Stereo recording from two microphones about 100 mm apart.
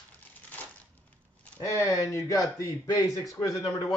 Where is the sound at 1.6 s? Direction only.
35° left (ahead or behind).